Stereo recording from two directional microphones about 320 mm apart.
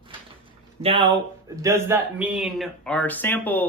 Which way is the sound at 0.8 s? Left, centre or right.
Centre.